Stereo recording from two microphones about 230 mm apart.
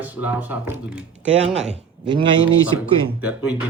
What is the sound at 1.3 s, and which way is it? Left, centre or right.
Speech, right.